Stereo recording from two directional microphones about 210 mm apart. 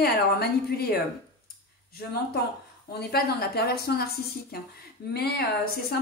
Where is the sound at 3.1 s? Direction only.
50° left (ahead or behind).